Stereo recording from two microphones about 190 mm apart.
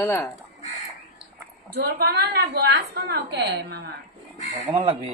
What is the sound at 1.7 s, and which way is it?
A woman's voice, 55° right (ahead or behind).